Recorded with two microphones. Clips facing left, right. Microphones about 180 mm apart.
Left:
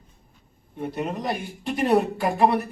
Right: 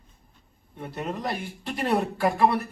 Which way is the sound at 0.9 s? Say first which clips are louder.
Left 2 dB; 15° left (ahead or behind).